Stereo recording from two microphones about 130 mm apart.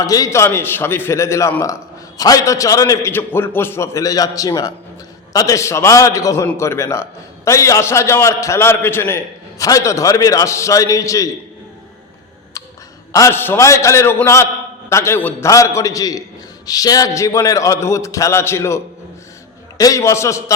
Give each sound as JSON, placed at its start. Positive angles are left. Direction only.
{"t": 0.0, "sound": "a man's voice", "side_deg": 25}
{"t": 12.6, "sound": "clicking", "side_deg": 25}
{"t": 13.1, "sound": "a man's voice", "side_deg": 20}
{"t": 19.8, "sound": "a man's voice", "side_deg": 25}